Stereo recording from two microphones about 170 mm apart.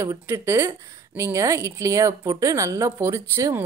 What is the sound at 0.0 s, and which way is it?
A woman's voice, 15° right (ahead or behind).